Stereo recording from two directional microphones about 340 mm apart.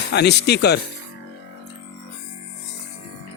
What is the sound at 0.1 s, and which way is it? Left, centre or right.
Music, left.